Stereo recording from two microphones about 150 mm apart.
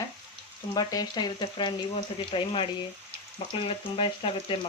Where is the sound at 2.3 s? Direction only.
35° left (ahead or behind).